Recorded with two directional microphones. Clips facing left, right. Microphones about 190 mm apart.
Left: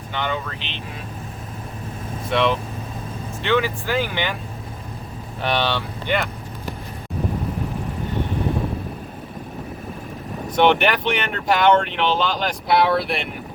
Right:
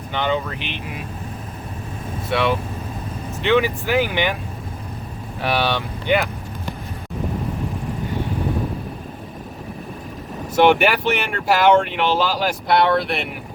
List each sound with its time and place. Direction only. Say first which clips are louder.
0.1 s speech: right 4 dB; 15° right (ahead or behind)
2.3 s speech: even; 5° right (ahead or behind)
3.4 s speech: right 3 dB; 15° right (ahead or behind)
5.4 s speech: right 1 dB; 5° right (ahead or behind)
10.5 s speech: right 2 dB; 5° right (ahead or behind)